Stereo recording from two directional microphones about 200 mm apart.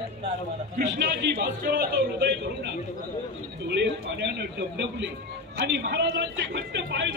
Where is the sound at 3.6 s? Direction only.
60° right (ahead or behind).